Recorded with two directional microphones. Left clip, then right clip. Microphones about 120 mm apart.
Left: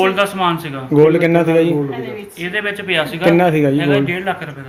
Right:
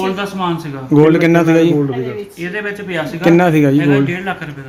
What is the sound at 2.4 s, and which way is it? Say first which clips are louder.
Speech: left 3 dB; 50° left (ahead or behind).